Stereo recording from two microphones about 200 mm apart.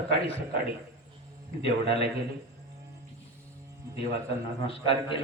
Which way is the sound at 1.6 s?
30° left (ahead or behind).